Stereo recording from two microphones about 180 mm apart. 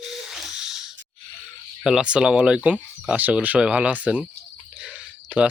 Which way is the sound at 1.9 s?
5° right (ahead or behind).